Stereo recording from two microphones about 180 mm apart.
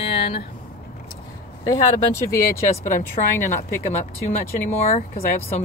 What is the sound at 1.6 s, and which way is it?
Speech, 20° left (ahead or behind).